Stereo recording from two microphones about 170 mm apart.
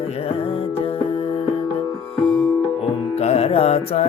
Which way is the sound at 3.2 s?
40° left (ahead or behind).